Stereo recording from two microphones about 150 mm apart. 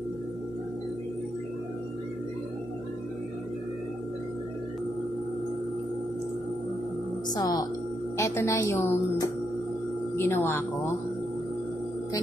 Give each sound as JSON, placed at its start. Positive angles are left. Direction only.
{"t": 7.3, "sound": "a woman's voice", "side_deg": 25}